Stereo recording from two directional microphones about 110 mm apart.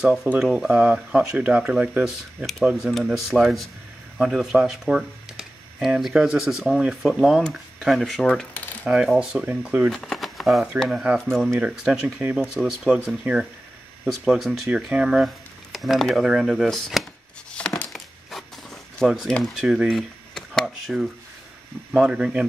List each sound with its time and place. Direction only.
0.0 s speech: centre (ahead or behind)
8.8 s speech: 10° right (ahead or behind)
9.8 s speech: 5° left (ahead or behind); by 12.4 s 15° right (ahead or behind)
12.5 s speech: 5° right (ahead or behind)
16.3 s crumpling: 5° right (ahead or behind)
19.3 s speech: centre (ahead or behind)